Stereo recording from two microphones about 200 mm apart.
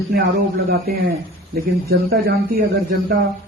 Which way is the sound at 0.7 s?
50° right (ahead or behind).